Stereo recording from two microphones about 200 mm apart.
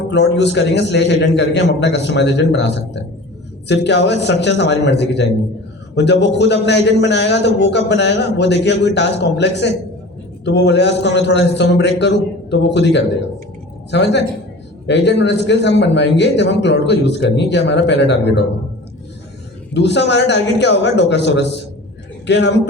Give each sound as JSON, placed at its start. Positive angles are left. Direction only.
{"t": 0.1, "sound": "a man's voice", "side_deg": 60}
{"t": 19.7, "sound": "a man's voice", "side_deg": 60}